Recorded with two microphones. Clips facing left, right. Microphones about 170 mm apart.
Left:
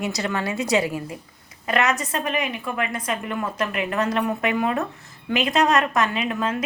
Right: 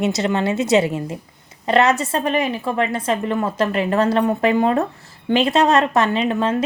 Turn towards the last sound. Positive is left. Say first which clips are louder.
# right 6 dB
turn(degrees=-30)  # may be behind; listen again after turning